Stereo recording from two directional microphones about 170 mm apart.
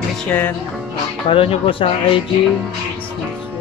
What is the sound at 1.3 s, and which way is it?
Speech, 30° left (ahead or behind).